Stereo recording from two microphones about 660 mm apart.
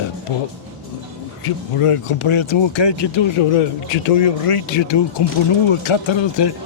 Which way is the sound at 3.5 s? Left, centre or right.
Left.